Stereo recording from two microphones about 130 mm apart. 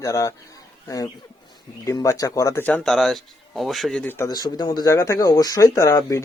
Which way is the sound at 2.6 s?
5° left (ahead or behind).